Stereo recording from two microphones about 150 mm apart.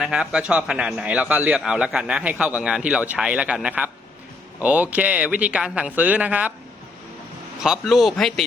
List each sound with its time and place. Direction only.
0.0 s a man's voice: 5° right (ahead or behind)
7.6 s speech: centre (ahead or behind)